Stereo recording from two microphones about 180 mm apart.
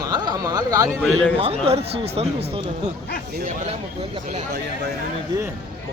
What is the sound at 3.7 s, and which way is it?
Speech, 35° right (ahead or behind).